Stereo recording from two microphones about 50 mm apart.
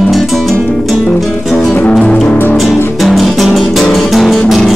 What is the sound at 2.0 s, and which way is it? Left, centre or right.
Music, centre.